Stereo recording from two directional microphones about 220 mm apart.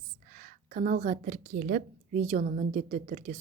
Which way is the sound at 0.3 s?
35° right (ahead or behind).